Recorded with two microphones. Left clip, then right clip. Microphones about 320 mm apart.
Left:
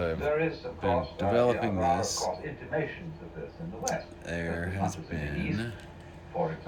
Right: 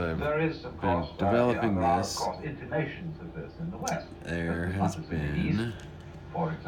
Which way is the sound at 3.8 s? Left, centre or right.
Centre.